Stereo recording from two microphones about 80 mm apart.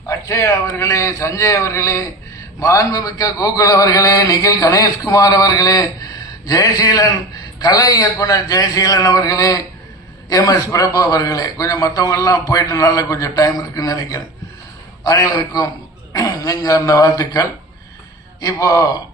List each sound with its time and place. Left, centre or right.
0.0 s a man's voice: left